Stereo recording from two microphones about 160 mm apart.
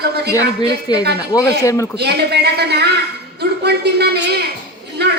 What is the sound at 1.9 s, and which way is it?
Speech, 90° right.